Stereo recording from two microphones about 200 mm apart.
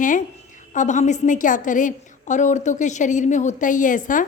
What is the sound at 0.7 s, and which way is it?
A woman's voice, 40° left (ahead or behind).